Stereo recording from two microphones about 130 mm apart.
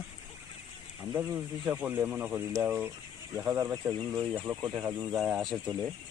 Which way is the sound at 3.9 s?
35° right (ahead or behind).